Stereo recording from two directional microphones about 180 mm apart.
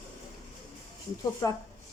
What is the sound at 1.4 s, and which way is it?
Speech, 20° left (ahead or behind).